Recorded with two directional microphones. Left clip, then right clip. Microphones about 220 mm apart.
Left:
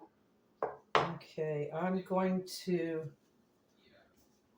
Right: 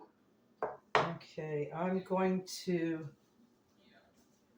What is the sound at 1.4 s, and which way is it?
Speech, 25° right (ahead or behind).